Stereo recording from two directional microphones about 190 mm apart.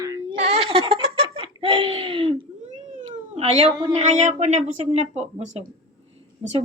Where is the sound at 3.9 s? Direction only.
35° right (ahead or behind).